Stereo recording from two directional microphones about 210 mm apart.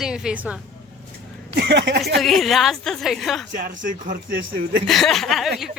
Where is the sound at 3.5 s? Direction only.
40° right (ahead or behind).